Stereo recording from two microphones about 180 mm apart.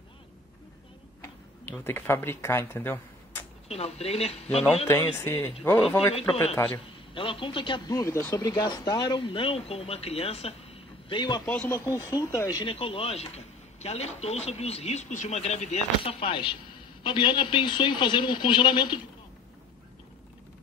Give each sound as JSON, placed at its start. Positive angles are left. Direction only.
{"t": 1.2, "sound": "speech", "side_deg": 10}
{"t": 3.6, "sound": "speech", "side_deg": 35}
{"t": 5.1, "sound": "speech", "side_deg": 15}
{"t": 5.8, "sound": "a man's voice", "side_deg": 0}
{"t": 6.5, "sound": "speech", "side_deg": 15}
{"t": 7.2, "sound": "speech", "side_deg": 30}
{"t": 11.4, "sound": "speech", "side_deg": 10}
{"t": 12.7, "sound": "speech", "side_deg": 30}